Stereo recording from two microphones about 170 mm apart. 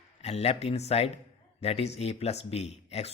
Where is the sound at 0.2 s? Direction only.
40° left (ahead or behind).